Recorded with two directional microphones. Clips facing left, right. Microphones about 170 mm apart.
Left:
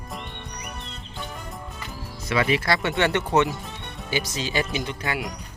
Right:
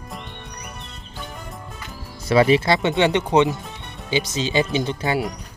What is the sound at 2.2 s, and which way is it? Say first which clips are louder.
Speech: right 7 dB; 35° right (ahead or behind).